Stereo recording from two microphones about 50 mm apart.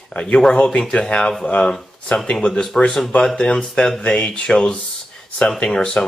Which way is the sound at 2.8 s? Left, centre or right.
Centre.